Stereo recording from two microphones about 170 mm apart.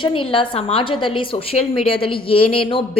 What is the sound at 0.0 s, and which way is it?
A woman's voice, 30° left (ahead or behind).